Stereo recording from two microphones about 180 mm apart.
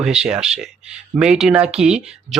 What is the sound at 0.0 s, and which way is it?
Speech, 5° right (ahead or behind).